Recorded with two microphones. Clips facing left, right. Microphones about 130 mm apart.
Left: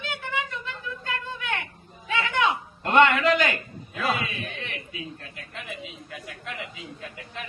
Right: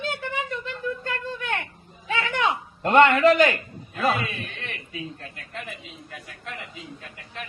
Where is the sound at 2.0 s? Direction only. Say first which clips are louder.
Even; 35° right (ahead or behind).